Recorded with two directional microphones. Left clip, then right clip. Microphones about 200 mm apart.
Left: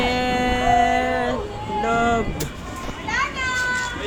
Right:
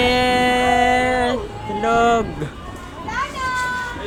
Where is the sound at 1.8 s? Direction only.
40° right (ahead or behind).